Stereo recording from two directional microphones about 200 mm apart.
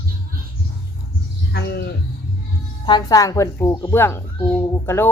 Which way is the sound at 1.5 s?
55° left (ahead or behind).